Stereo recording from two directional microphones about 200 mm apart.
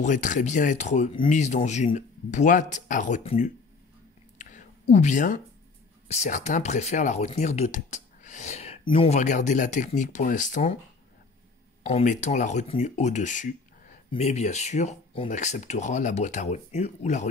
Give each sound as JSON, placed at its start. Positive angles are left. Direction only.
{"t": 0.0, "sound": "speech", "side_deg": 40}
{"t": 4.4, "sound": "a sound", "side_deg": 40}
{"t": 6.0, "sound": "speech", "side_deg": 35}
{"t": 11.8, "sound": "speech", "side_deg": 35}